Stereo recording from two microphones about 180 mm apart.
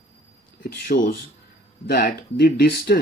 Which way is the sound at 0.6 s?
50° left (ahead or behind).